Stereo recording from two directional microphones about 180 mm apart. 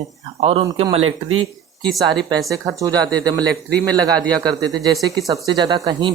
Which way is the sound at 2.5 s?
20° right (ahead or behind).